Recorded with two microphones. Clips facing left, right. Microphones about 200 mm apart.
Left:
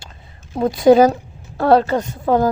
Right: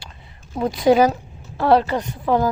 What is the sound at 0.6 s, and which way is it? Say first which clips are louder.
A woman's voice: left 4 dB; 45° left (ahead or behind).